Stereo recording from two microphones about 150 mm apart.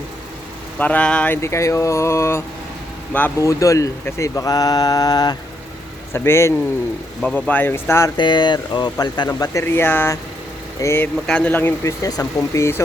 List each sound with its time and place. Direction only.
0.8 s speech: 10° left (ahead or behind)
1.4 s speech: 20° left (ahead or behind)
3.6 s speech: 20° left (ahead or behind)
7.2 s speech: 5° left (ahead or behind)
8.1 s speech: 30° left (ahead or behind)